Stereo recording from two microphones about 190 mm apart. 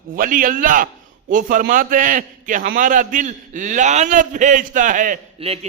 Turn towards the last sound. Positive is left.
turn(degrees=-30)  # may be behind; listen again after turning